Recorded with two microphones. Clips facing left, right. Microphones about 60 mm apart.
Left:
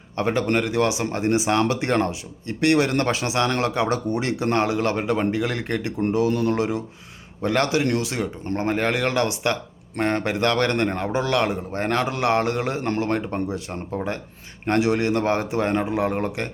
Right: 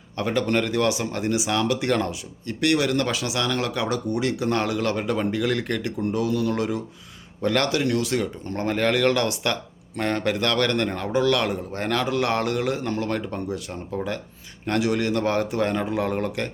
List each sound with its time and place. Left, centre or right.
0.2 s a man's voice: left
6.2 s speech: left
6.6 s a man's voice: left